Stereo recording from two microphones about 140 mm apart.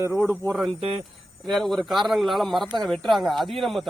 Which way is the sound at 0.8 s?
45° right (ahead or behind).